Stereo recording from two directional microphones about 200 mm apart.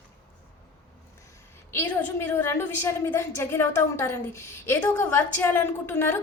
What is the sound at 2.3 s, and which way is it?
A woman's voice, 10° left (ahead or behind).